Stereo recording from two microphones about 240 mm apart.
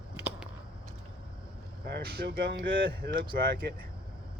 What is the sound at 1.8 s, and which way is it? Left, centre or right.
Speech, right.